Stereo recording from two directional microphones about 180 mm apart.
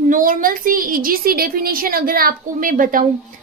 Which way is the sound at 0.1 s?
50° right (ahead or behind).